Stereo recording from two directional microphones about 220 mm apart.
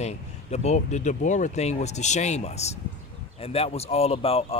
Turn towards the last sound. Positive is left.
turn(degrees=25)  # may be behind; listen again after turning